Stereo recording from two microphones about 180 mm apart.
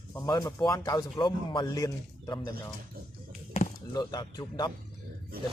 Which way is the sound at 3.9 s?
20° left (ahead or behind).